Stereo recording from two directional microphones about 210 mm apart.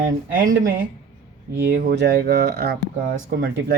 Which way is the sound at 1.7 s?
45° right (ahead or behind).